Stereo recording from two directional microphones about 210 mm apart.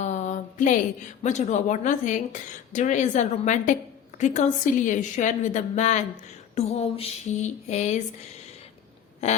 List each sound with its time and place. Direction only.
0.0 s a sound: 35° left (ahead or behind)
1.2 s a woman's voice: 35° left (ahead or behind)
9.2 s a woman's voice: 30° left (ahead or behind)